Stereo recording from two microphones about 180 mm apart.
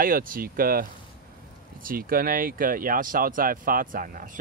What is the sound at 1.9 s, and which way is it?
Speech, 55° right (ahead or behind).